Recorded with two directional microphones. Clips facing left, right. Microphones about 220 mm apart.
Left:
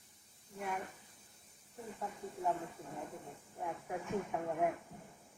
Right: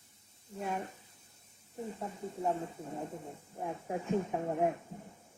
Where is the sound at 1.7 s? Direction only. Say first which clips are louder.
Right 5 dB; 25° right (ahead or behind).